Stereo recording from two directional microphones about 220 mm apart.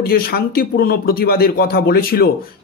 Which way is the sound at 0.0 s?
45° left (ahead or behind).